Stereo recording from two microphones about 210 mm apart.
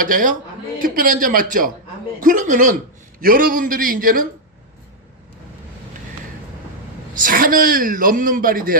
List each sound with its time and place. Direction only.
0.0 s a man's voice: 40° right (ahead or behind)
7.2 s a man's voice: 40° right (ahead or behind)